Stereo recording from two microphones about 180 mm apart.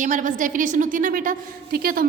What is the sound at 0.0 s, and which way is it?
A woman's voice, 45° right (ahead or behind).